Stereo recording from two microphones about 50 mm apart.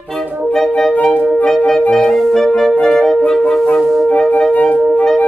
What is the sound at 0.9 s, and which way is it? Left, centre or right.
Music, left.